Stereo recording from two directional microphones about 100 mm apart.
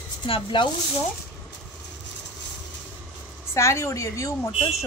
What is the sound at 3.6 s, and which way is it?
A woman's voice, 30° left (ahead or behind).